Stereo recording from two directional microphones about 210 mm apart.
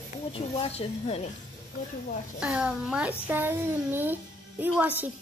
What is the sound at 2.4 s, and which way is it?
A child's voice, 5° right (ahead or behind).